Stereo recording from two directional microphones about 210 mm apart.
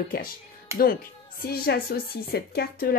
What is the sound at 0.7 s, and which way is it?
Speech, 10° right (ahead or behind).